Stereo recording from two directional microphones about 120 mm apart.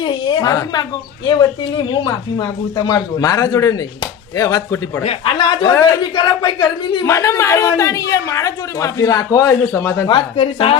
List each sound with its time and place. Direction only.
0.0 s a woman's voice: 40° left (ahead or behind)
5.0 s a man's voice: 40° left (ahead or behind)
7.0 s speech: 25° left (ahead or behind)
10.1 s a man's voice: 45° left (ahead or behind)